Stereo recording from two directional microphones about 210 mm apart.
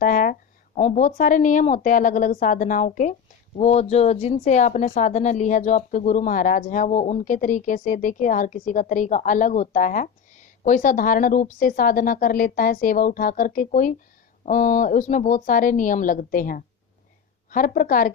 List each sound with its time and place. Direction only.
0.0 s speech: 40° left (ahead or behind)